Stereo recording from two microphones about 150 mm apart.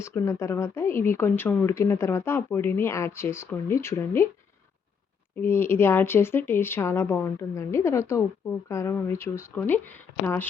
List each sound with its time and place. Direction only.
0.0 s speech: 20° left (ahead or behind)
5.4 s speech: 15° left (ahead or behind)